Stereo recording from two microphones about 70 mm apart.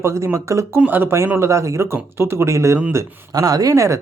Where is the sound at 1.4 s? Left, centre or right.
Right.